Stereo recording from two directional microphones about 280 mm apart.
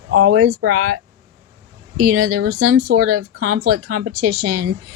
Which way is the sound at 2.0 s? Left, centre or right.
Right.